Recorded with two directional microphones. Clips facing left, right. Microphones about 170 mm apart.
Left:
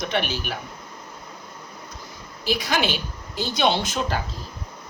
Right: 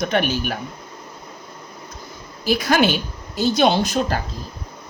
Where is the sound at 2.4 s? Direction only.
50° right (ahead or behind).